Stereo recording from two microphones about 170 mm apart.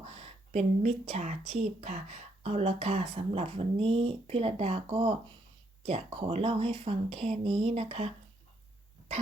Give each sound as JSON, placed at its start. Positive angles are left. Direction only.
{"t": 0.0, "sound": "a woman's voice", "side_deg": -40}